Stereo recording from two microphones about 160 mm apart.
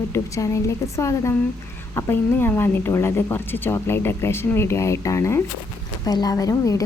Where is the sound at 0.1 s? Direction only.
20° left (ahead or behind).